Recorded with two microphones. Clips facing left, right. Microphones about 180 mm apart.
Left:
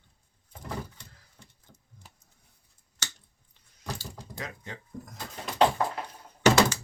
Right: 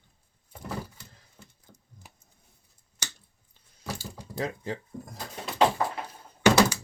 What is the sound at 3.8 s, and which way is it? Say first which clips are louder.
Mechanisms: right 1 dB; 5° right (ahead or behind).